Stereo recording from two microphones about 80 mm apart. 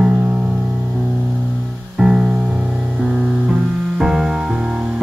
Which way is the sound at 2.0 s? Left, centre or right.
Centre.